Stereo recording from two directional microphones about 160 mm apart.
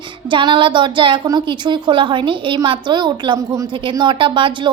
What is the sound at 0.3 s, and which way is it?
A woman's voice, 30° right (ahead or behind).